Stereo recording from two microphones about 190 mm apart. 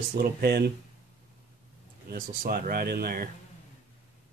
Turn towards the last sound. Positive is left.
turn(degrees=-50)  # may be behind; listen again after turning